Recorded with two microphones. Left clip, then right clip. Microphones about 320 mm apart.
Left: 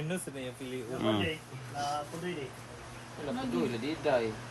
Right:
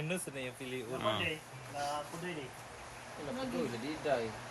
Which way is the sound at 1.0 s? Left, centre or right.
Centre.